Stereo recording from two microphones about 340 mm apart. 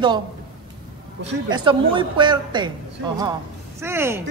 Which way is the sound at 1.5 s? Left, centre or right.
Centre.